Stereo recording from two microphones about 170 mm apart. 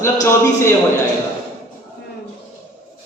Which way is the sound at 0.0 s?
15° left (ahead or behind).